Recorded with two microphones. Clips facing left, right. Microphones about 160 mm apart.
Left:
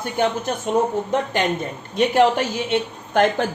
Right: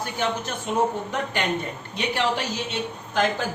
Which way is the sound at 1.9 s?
45° left (ahead or behind).